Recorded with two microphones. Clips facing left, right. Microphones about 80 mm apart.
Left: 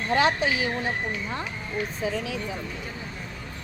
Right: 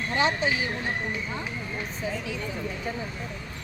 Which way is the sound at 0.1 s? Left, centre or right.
Left.